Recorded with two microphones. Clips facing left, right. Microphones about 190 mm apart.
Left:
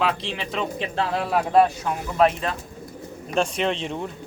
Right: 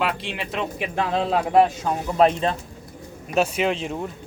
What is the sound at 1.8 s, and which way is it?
Speech, 30° right (ahead or behind).